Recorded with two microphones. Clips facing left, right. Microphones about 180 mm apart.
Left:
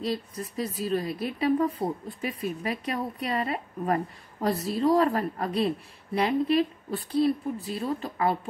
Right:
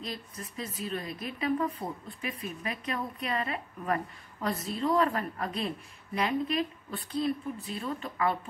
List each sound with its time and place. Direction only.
0.0 s a woman's voice: 35° left (ahead or behind)